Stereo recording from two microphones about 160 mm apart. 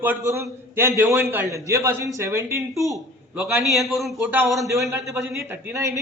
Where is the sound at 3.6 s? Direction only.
Centre (ahead or behind).